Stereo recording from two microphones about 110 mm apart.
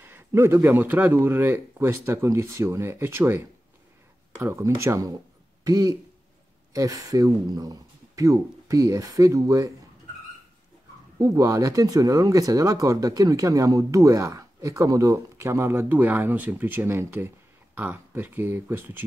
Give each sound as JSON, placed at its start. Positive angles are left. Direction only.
{"t": 0.0, "sound": "speech", "side_deg": -20}
{"t": 11.1, "sound": "speech", "side_deg": -30}